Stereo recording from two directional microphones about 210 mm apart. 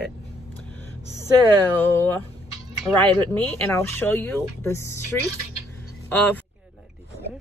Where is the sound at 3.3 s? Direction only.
10° left (ahead or behind).